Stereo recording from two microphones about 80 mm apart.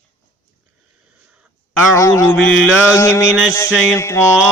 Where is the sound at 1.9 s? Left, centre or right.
Left.